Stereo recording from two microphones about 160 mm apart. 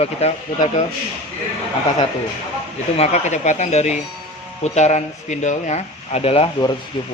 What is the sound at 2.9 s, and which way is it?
Speech, 45° left (ahead or behind).